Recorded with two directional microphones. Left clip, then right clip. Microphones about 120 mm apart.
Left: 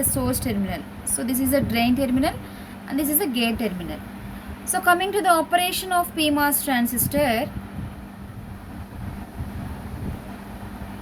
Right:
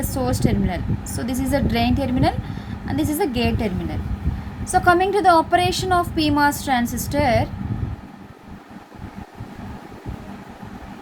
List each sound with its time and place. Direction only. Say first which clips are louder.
0.1 s a woman's voice: right 3 dB; 40° right (ahead or behind)
4.7 s a woman's voice: right 4 dB; 35° right (ahead or behind)